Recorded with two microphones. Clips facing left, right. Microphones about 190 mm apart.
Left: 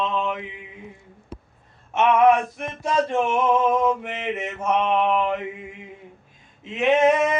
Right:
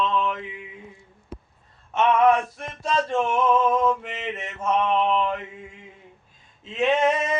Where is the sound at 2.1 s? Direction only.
20° left (ahead or behind).